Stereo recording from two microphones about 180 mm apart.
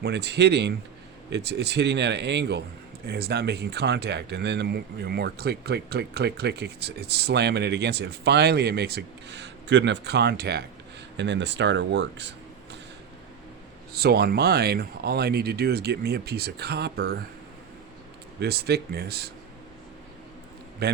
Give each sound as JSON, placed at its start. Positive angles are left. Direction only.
{"t": 0.0, "sound": "speech", "side_deg": -70}
{"t": 11.2, "sound": "speech", "side_deg": -75}
{"t": 13.9, "sound": "speech", "side_deg": -60}
{"t": 18.3, "sound": "speech", "side_deg": -65}
{"t": 20.8, "sound": "speech", "side_deg": -60}